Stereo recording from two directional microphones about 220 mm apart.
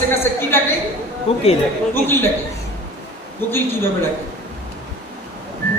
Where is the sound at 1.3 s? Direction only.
25° left (ahead or behind).